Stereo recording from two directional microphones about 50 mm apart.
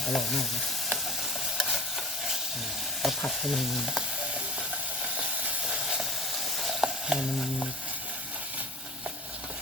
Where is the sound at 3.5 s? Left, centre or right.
Centre.